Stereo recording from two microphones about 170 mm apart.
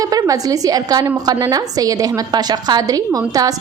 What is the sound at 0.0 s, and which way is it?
A woman's voice, 20° right (ahead or behind).